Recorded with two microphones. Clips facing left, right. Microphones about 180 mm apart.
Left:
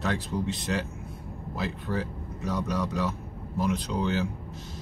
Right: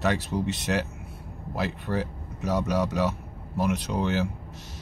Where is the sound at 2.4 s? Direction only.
85° right.